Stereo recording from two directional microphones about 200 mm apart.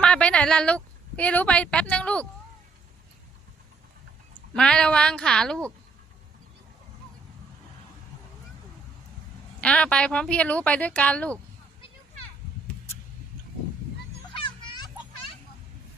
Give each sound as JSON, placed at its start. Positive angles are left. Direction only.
{"t": 0.0, "sound": "a woman's voice", "side_deg": 5}
{"t": 4.5, "sound": "a woman's voice", "side_deg": 5}
{"t": 9.6, "sound": "a woman's voice", "side_deg": 5}
{"t": 14.4, "sound": "children playing", "side_deg": 25}